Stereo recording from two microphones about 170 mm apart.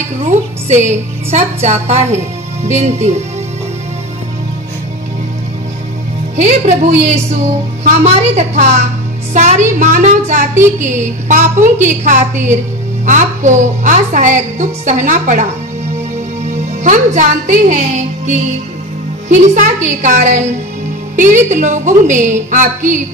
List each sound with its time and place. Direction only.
0.2 s speech: 45° right (ahead or behind)
6.3 s a woman's voice: 45° right (ahead or behind)
16.8 s a woman's voice: 45° right (ahead or behind)